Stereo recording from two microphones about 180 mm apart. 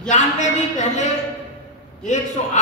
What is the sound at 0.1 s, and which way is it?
Speech, 40° left (ahead or behind).